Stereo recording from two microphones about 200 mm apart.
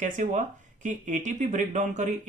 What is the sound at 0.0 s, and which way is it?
Speech, 40° right (ahead or behind).